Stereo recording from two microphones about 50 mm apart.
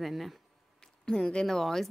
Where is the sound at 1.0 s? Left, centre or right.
Centre.